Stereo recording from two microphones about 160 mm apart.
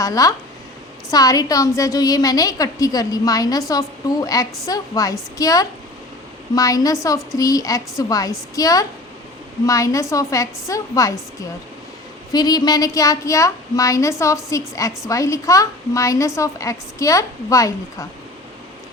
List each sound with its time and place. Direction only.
0.0 s a woman's voice: 20° left (ahead or behind)